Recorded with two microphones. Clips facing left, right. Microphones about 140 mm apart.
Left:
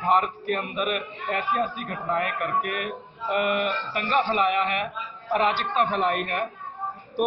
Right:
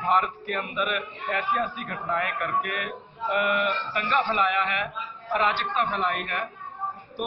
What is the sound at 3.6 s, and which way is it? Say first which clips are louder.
A man's voice: even; 30° left (ahead or behind).